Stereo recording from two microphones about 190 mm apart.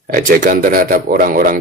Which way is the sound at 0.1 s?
45° right (ahead or behind).